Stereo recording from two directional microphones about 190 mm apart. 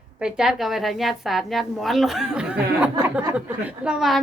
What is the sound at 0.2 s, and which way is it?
A woman's voice, 5° right (ahead or behind).